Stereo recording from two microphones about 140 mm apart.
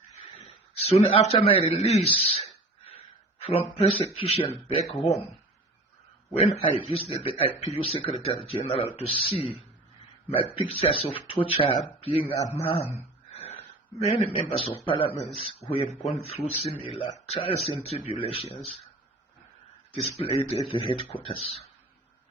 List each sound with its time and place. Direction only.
0.3 s a sound: 50° left (ahead or behind)
3.8 s speech: 45° left (ahead or behind)
6.3 s a man's voice: 40° left (ahead or behind)
12.6 s a sound: 45° left (ahead or behind)
14.1 s a man's voice: 45° left (ahead or behind)
19.9 s a man's voice: 40° left (ahead or behind)